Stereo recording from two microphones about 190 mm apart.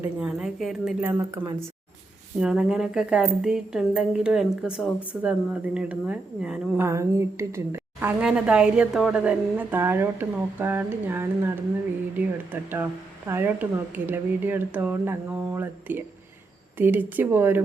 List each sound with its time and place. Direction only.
0.0 s a woman's voice: 5° right (ahead or behind)
1.2 s a woman's voice: 15° right (ahead or behind)
2.4 s a woman's voice: 5° right (ahead or behind)
12.7 s a woman's voice: 10° right (ahead or behind)